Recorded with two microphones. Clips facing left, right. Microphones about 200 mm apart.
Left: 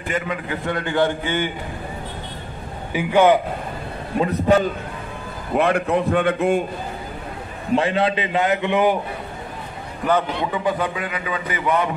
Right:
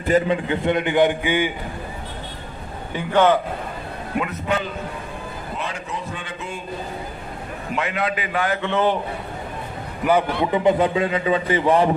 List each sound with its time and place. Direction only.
0.1 s a man's voice: 25° right (ahead or behind)
2.9 s a man's voice: 10° left (ahead or behind)
4.2 s a man's voice: 35° left (ahead or behind)
5.6 s a man's voice: 60° left (ahead or behind)
7.7 s a man's voice: 30° left (ahead or behind); by 8.9 s 15° left (ahead or behind)
10.5 s a man's voice: 20° right (ahead or behind)